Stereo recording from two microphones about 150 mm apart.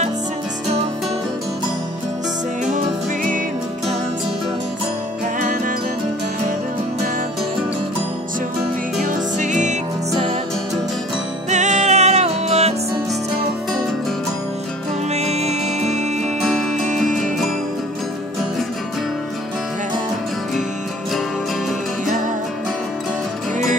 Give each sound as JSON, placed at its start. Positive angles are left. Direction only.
{"t": 5.4, "sound": "music", "side_deg": -55}
{"t": 9.0, "sound": "music", "side_deg": -55}
{"t": 11.5, "sound": "music", "side_deg": -50}
{"t": 15.1, "sound": "music", "side_deg": -45}
{"t": 22.0, "sound": "music", "side_deg": -60}